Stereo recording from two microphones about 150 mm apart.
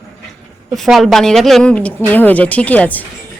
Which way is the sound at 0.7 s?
Centre (ahead or behind).